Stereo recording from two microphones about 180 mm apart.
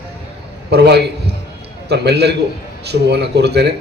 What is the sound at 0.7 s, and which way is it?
A man's voice, 65° right (ahead or behind).